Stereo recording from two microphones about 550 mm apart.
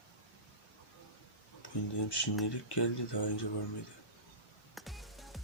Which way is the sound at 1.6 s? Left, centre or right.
Left.